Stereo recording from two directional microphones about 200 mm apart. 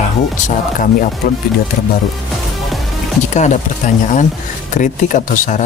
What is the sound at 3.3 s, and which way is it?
Speech, 35° left (ahead or behind).